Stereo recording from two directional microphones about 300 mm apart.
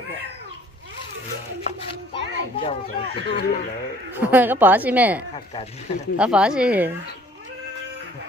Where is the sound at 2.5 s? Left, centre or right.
Centre.